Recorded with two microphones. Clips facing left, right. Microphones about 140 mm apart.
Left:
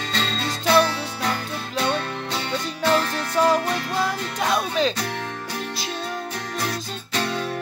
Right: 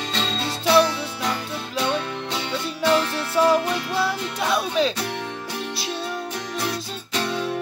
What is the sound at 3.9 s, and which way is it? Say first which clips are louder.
Music: right 1 dB; 45° left (ahead or behind).